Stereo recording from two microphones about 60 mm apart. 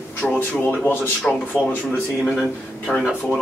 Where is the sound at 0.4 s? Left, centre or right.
Left.